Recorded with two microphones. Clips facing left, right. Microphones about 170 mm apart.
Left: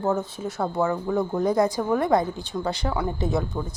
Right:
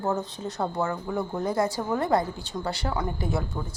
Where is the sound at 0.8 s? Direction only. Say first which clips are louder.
Left 8 dB; 15° left (ahead or behind).